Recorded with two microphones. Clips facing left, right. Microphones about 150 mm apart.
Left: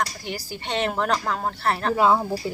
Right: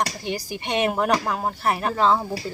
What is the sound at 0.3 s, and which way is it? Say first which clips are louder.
Speech: right 3 dB; 15° right (ahead or behind).